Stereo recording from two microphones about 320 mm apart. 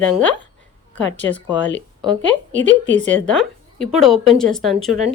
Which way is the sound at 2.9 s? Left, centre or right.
Right.